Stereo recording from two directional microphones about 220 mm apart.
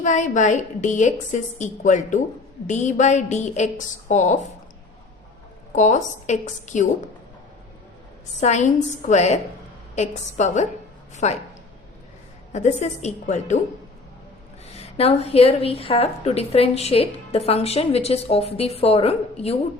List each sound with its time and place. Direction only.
0.0 s a woman's voice: 35° left (ahead or behind)
5.7 s a woman's voice: 35° left (ahead or behind)
8.4 s a woman's voice: 30° left (ahead or behind)
12.5 s a woman's voice: 30° left (ahead or behind)
14.8 s a woman's voice: 25° left (ahead or behind)